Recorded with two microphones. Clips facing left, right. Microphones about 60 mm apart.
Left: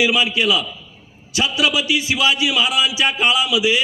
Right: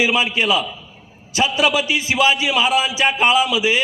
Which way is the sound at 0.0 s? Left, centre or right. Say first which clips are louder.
Even; right.